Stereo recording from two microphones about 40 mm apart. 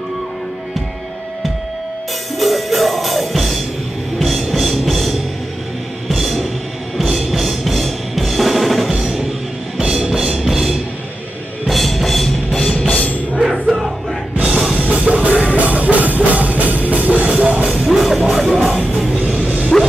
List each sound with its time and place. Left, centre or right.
2.3 s music: centre
12.7 s music: left
13.4 s music: centre
14.8 s music: right
17.6 s music: centre
19.1 s music: right
19.7 s bow-wow: centre